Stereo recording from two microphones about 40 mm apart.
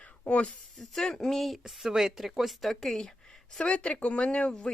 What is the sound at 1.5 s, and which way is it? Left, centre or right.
A woman's voice, centre.